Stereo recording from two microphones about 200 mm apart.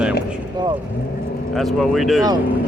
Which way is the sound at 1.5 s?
Centre (ahead or behind).